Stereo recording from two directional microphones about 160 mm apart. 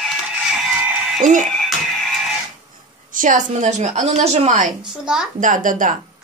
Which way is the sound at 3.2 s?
50° right (ahead or behind).